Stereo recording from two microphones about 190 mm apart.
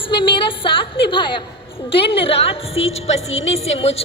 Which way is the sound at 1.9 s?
30° left (ahead or behind).